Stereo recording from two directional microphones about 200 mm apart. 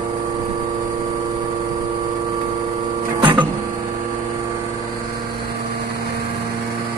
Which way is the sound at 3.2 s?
25° right (ahead or behind).